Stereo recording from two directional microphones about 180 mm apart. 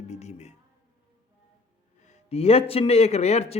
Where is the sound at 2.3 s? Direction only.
35° left (ahead or behind).